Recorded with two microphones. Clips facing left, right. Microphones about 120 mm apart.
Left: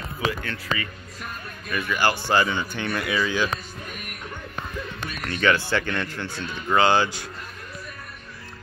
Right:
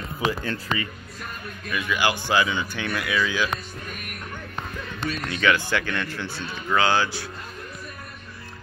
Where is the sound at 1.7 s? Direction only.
5° right (ahead or behind).